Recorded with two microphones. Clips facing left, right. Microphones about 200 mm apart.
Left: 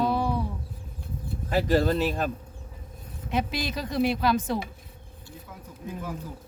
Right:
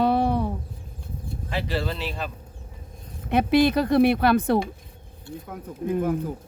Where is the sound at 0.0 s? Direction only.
65° right (ahead or behind).